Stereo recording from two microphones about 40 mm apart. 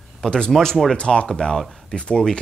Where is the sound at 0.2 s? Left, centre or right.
Centre.